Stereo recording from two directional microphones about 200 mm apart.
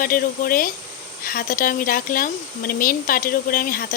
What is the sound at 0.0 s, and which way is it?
Speech, 45° left (ahead or behind).